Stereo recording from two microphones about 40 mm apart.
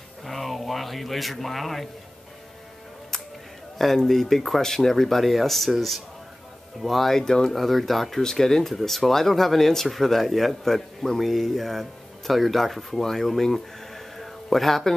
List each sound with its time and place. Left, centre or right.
0.2 s a sound: centre
3.7 s speech: centre
7.2 s speech: centre
7.5 s speech: centre
8.2 s speech: centre